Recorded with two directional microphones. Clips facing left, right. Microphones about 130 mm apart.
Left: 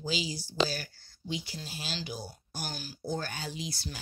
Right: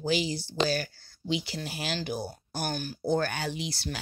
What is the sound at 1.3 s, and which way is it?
Speech, 80° right.